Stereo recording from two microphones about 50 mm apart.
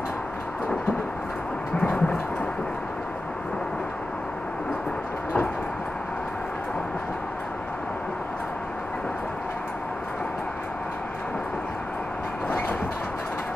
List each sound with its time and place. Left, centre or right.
1.8 s thunder: left
12.4 s train: left